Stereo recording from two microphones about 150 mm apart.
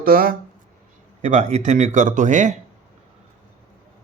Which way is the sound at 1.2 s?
50° right (ahead or behind).